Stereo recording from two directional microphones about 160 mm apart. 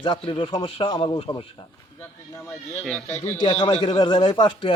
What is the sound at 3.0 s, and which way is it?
Speech, 15° left (ahead or behind).